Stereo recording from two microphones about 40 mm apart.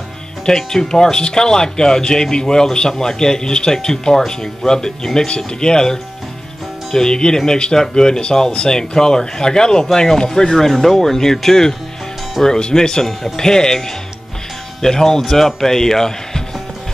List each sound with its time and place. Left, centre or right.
0.5 s speech: centre
10.6 s speech: centre